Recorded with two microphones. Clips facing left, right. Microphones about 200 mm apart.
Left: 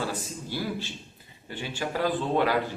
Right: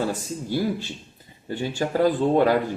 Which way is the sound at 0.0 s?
45° right (ahead or behind).